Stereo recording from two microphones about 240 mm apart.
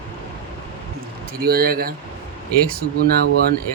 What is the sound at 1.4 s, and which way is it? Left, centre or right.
Speech, right.